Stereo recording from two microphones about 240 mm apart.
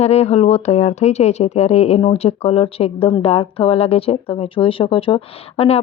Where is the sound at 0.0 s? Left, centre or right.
Left.